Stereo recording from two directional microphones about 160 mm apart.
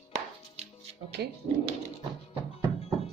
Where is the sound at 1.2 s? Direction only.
90° right.